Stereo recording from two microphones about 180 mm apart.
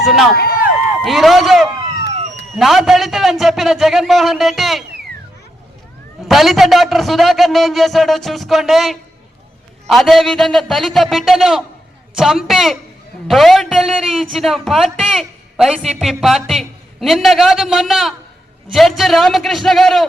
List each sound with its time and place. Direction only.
0.0 s a sound: centre (ahead or behind)
1.0 s a man's voice: centre (ahead or behind)
6.2 s a man's voice: centre (ahead or behind)